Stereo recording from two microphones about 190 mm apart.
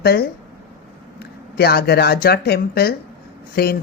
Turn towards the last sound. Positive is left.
turn(degrees=55)  # may be behind; listen again after turning